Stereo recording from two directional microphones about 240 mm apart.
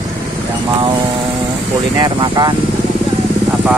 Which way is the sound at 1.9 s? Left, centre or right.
Centre.